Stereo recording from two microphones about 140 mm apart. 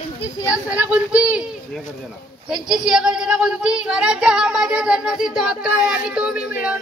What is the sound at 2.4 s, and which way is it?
Speech, 5° right (ahead or behind).